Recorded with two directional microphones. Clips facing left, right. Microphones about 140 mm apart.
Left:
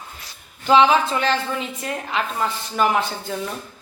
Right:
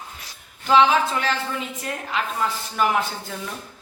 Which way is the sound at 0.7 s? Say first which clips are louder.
Left 2 dB; centre (ahead or behind).